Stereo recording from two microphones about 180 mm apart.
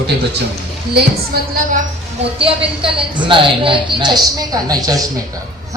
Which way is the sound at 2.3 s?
30° right (ahead or behind).